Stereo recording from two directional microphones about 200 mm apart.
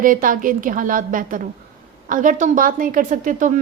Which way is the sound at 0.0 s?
40° right (ahead or behind).